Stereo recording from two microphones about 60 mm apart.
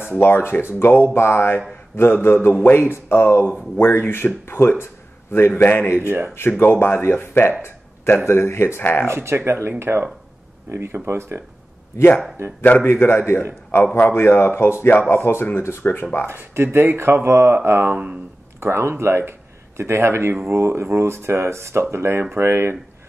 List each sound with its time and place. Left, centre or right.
0.2 s speech: left
6.0 s speech: right
6.6 s speech: left
7.6 s a sound: left
8.3 s speech: left
9.1 s speech: right
12.8 s speech: left
16.3 s speech: right